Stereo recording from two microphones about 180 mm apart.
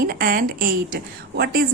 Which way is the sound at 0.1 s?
55° right (ahead or behind).